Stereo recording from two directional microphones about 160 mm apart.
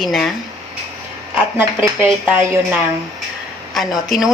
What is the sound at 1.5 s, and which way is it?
Speech, 10° right (ahead or behind).